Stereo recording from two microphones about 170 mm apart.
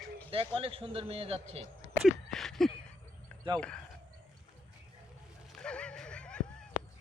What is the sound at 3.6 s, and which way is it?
Speech, 5° left (ahead or behind).